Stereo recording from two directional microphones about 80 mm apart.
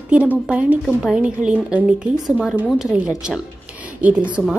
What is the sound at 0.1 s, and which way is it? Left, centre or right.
A woman's voice, centre.